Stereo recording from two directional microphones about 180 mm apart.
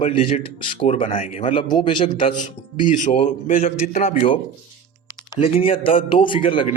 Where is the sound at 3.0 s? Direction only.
45° left (ahead or behind).